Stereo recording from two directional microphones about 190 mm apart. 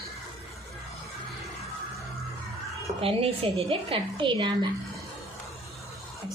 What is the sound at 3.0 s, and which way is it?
A woman's voice, 30° right (ahead or behind).